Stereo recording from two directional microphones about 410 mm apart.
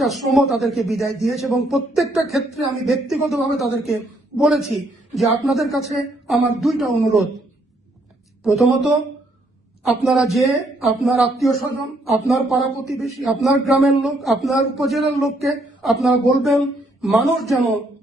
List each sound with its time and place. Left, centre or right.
0.0 s speech: centre
8.4 s speech: centre